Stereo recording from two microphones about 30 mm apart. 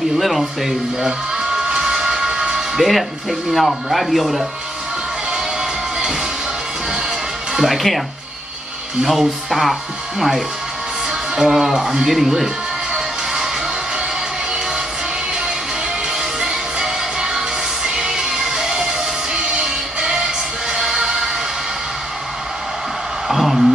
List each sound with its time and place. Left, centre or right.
0.2 s speech: centre
1.4 s train: centre
2.7 s speech: centre
5.3 s music: centre
7.5 s speech: centre
9.0 s speech: centre
11.1 s speech: centre
12.9 s music: centre
16.1 s music: centre
23.2 s a sound: centre